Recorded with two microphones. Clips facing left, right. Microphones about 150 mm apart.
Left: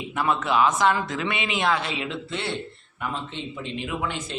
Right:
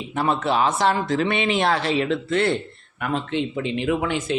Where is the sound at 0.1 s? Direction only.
30° right (ahead or behind).